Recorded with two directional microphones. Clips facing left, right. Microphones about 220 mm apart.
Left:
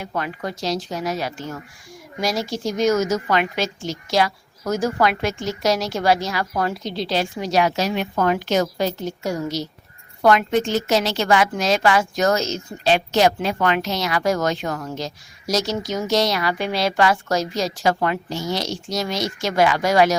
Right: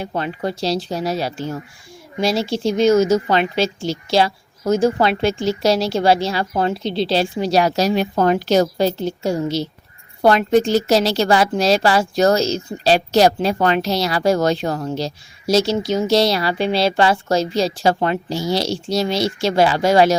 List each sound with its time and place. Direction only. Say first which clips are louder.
0.0 s a woman's voice: right 4 dB; 30° right (ahead or behind)